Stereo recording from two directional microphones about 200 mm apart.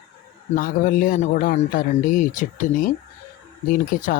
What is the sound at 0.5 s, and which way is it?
Speech, 40° left (ahead or behind).